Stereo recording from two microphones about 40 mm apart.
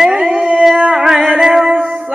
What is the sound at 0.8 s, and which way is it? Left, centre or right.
Music, right.